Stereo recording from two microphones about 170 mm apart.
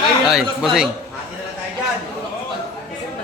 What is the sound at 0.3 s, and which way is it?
Speech, centre (ahead or behind).